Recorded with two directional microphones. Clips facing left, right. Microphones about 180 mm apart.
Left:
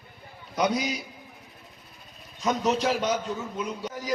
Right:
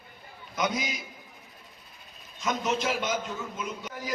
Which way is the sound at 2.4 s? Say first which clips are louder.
Left 4 dB; 35° left (ahead or behind).